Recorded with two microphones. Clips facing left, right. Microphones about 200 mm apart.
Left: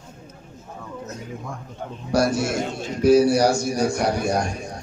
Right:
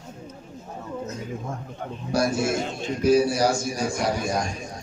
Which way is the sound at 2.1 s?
75° left (ahead or behind).